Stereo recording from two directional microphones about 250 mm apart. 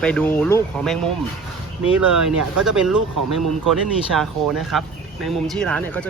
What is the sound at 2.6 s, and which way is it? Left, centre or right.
Speech, centre.